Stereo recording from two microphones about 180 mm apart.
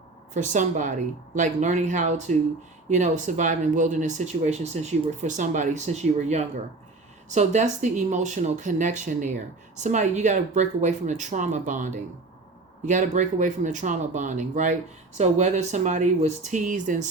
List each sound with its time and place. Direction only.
0.3 s speech: 45° right (ahead or behind)